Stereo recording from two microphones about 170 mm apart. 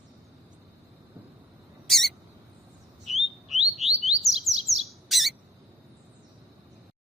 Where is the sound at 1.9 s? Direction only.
Centre (ahead or behind).